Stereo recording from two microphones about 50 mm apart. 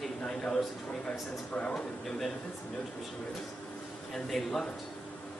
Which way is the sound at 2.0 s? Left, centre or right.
Centre.